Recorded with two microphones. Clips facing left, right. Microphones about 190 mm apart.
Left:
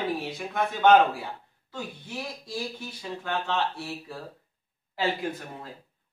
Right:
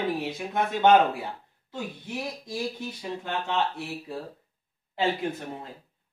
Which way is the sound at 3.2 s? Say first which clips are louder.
Even; 15° right (ahead or behind).